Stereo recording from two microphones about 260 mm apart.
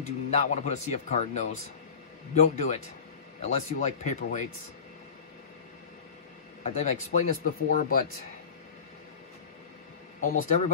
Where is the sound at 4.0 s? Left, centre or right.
Left.